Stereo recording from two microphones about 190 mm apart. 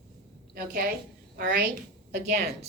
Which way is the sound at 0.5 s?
50° right (ahead or behind).